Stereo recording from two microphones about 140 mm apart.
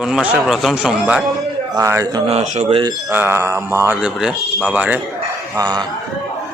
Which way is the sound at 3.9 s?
5° right (ahead or behind).